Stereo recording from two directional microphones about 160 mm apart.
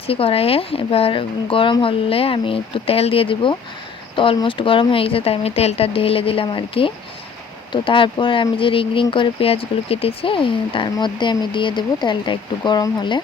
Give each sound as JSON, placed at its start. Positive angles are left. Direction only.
{"t": 0.1, "sound": "speech", "side_deg": 35}